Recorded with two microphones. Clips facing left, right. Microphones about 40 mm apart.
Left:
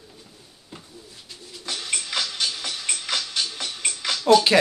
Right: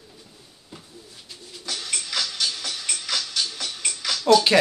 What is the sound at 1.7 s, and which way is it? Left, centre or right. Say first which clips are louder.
Music: left 1 dB; left.